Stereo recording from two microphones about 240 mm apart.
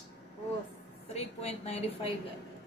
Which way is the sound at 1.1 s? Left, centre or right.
Left.